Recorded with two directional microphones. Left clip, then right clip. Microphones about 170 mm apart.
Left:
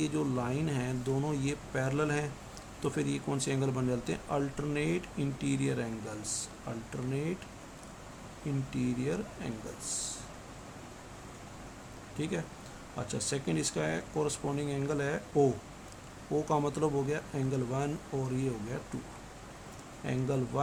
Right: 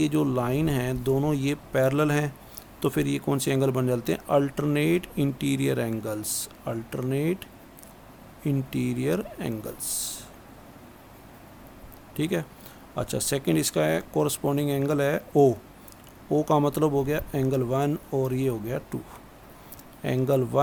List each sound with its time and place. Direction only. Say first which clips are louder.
0.0 s speech: right 8 dB; 50° right (ahead or behind)
8.4 s speech: right 7 dB; 55° right (ahead or behind)
12.1 s speech: right 8 dB; 55° right (ahead or behind)
20.1 s speech: right 10 dB; 55° right (ahead or behind)